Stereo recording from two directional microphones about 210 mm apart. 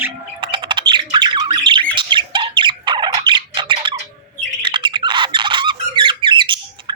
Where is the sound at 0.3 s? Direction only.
20° right (ahead or behind).